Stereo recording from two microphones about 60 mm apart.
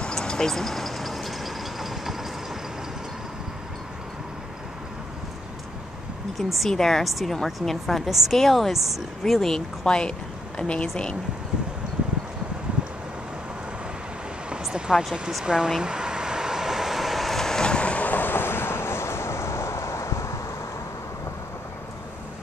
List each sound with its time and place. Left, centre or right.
0.0 s vehicle: centre
6.3 s a woman's voice: centre
9.2 s speech: centre
14.6 s speech: centre
15.8 s vehicle: centre; by 20.3 s left